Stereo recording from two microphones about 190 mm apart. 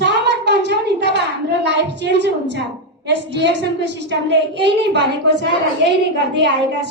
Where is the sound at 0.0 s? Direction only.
65° right (ahead or behind).